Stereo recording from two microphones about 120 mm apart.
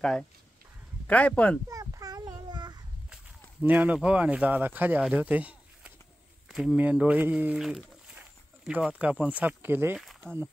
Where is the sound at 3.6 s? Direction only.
10° right (ahead or behind).